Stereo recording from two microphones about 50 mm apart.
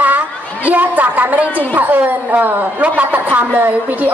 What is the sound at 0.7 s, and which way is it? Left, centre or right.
A man's voice, right.